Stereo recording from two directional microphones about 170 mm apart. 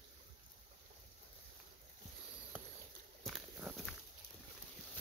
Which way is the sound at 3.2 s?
Centre (ahead or behind).